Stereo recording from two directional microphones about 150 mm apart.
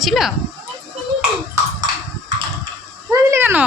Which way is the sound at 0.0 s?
Centre (ahead or behind).